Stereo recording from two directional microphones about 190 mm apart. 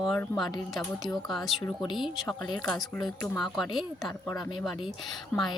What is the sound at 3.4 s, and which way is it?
Speech, centre (ahead or behind).